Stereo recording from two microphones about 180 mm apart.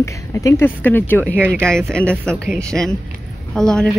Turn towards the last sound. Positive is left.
turn(degrees=5)  # may be behind; listen again after turning